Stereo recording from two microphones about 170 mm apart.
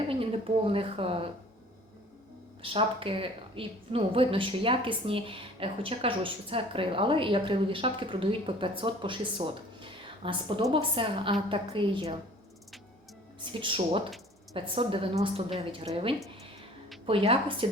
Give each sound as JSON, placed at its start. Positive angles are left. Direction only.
{"t": 0.1, "sound": "a sound", "side_deg": -35}
{"t": 2.6, "sound": "a woman's voice", "side_deg": -30}
{"t": 13.4, "sound": "a woman's voice", "side_deg": -30}
{"t": 17.1, "sound": "a woman's voice", "side_deg": -30}